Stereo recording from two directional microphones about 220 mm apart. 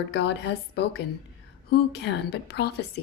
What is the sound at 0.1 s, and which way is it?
A woman's voice, 50° left (ahead or behind).